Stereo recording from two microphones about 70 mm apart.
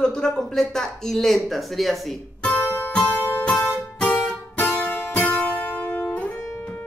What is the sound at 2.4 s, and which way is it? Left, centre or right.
Music, left.